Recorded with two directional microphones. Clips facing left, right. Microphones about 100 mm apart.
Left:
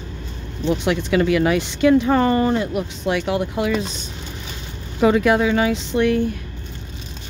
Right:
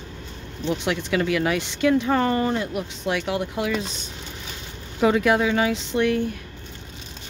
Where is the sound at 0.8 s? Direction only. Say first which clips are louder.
Left 5 dB; 20° left (ahead or behind).